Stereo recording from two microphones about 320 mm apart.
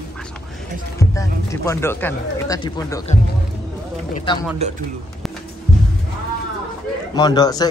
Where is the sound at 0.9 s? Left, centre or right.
Centre.